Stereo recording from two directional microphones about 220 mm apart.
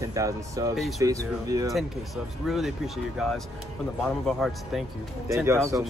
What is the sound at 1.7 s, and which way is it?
Speech, centre (ahead or behind).